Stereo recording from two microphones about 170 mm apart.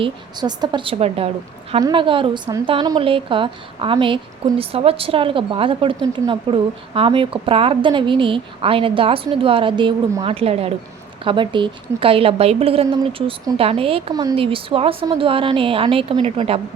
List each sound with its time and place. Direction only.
0.0 s speech: 25° right (ahead or behind)